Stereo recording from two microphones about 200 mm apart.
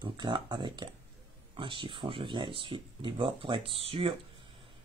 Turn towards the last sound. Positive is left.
turn(degrees=-30)  # may be behind; listen again after turning